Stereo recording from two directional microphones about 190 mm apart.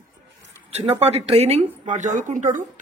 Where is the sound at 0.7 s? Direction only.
35° right (ahead or behind).